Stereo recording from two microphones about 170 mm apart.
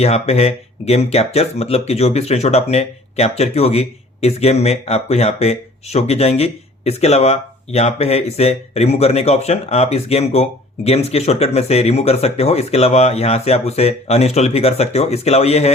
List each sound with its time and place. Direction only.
0.0 s speech: 40° left (ahead or behind)